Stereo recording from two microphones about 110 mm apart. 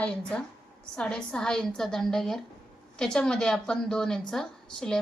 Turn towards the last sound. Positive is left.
turn(degrees=5)  # may be behind; listen again after turning